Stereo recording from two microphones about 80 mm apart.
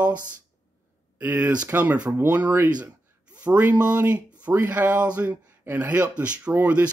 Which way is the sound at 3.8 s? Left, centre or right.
Centre.